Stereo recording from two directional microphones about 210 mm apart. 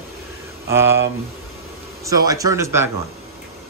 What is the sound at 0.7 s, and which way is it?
Speech, 10° right (ahead or behind).